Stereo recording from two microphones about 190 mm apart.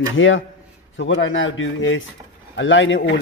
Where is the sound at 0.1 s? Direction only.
90° left.